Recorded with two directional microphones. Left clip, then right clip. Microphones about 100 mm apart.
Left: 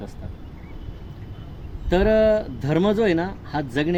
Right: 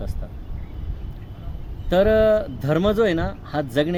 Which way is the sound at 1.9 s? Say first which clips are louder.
Right 1 dB; 25° right (ahead or behind).